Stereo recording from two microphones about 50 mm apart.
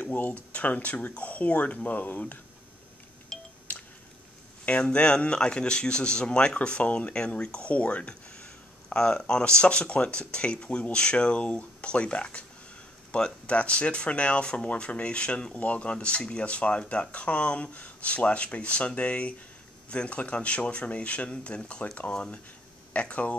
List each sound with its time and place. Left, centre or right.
0.0 s speech: left
3.3 s music: centre
3.7 s telephone dialing: left
4.6 s speech: left